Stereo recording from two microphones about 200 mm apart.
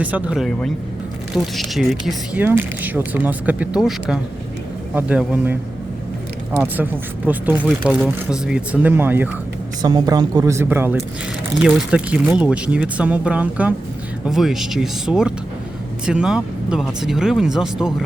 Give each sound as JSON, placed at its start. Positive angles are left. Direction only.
{"t": 0.0, "sound": "speech", "side_deg": -5}
{"t": 9.8, "sound": "speech", "side_deg": -20}